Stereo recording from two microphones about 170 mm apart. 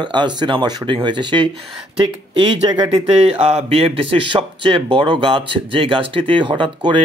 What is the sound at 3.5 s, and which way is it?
Speech, 40° right (ahead or behind).